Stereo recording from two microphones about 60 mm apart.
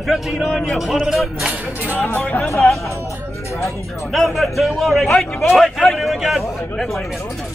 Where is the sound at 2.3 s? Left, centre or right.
Left.